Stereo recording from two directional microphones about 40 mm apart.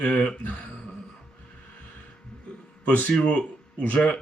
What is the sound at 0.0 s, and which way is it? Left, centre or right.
Speech, left.